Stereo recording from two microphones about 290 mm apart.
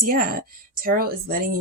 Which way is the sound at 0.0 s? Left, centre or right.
Right.